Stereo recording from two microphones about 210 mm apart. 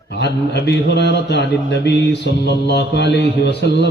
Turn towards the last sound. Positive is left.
turn(degrees=55)  # may be behind; listen again after turning